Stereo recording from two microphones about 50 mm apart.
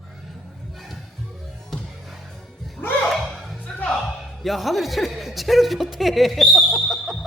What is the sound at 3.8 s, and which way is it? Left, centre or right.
Music, left.